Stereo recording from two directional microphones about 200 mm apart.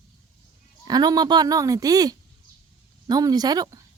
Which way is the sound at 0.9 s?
20° right (ahead or behind).